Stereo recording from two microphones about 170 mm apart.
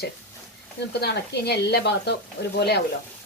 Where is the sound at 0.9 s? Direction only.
75° left (ahead or behind).